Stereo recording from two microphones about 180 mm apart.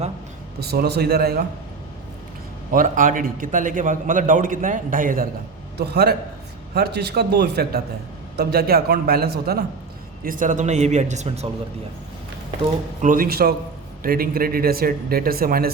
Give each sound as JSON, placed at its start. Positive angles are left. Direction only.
{"t": 0.6, "sound": "speech", "side_deg": -65}
{"t": 2.7, "sound": "a man's voice", "side_deg": -45}
{"t": 5.7, "sound": "a man's voice", "side_deg": -65}
{"t": 10.2, "sound": "speech", "side_deg": -50}
{"t": 13.0, "sound": "speech", "side_deg": -50}